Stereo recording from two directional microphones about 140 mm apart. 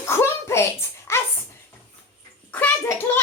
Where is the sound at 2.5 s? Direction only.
10° left (ahead or behind).